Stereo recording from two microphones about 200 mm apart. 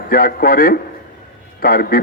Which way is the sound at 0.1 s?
50° left (ahead or behind).